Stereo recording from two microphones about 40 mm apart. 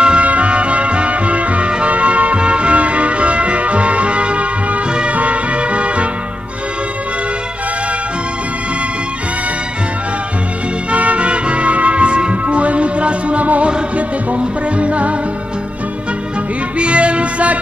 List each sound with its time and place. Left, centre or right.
0.0 s music: right
10.9 s music: right
16.7 s music: right